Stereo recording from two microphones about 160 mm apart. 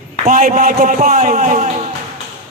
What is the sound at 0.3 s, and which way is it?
A man's voice, 55° right (ahead or behind).